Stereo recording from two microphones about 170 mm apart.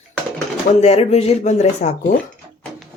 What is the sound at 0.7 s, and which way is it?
Speech, 40° left (ahead or behind).